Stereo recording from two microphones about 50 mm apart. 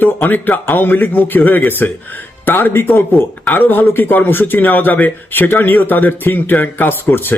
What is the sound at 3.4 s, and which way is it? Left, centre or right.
A man's voice, left.